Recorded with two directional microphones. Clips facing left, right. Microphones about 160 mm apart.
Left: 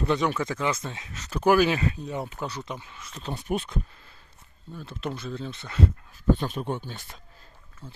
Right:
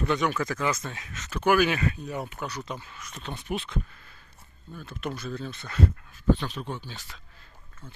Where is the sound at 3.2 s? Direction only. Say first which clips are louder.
Left 4 dB; 40° left (ahead or behind).